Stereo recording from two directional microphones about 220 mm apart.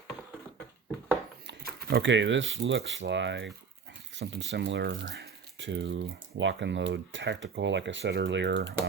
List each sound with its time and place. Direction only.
1.5 s speech: 50° right (ahead or behind)